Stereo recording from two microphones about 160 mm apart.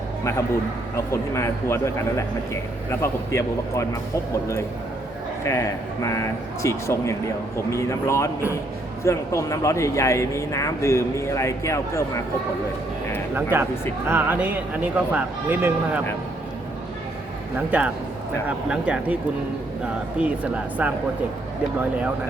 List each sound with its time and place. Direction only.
1.1 s speech: 15° left (ahead or behind)
5.5 s speech: 20° left (ahead or behind)
13.3 s speech: 15° right (ahead or behind)
17.7 s speech: 10° right (ahead or behind)